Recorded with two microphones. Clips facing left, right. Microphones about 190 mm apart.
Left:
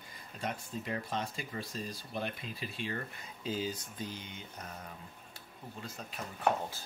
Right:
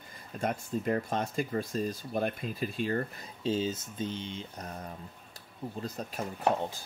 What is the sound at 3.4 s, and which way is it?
Speech, 25° right (ahead or behind).